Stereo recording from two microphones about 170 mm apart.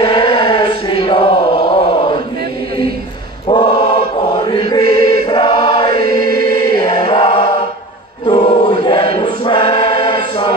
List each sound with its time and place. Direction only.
0.0 s chant: 30° left (ahead or behind)
3.4 s mantra: 30° left (ahead or behind)
4.8 s chant: 60° right (ahead or behind)
5.3 s choir: 30° left (ahead or behind)
5.9 s choir: 60° right (ahead or behind)
6.7 s choir: 25° left (ahead or behind)